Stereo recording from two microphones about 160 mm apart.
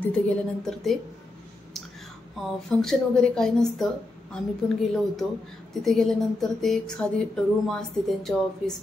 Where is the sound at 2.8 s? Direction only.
5° left (ahead or behind).